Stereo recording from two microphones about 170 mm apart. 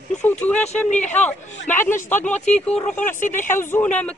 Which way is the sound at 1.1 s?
10° left (ahead or behind).